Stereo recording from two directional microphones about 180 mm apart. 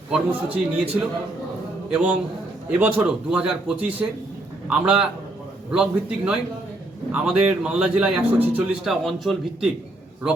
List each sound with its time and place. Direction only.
0.1 s a man's voice: 10° right (ahead or behind)